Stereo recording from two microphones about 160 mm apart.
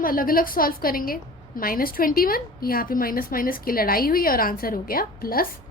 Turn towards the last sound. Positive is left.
turn(degrees=65)  # may be behind; listen again after turning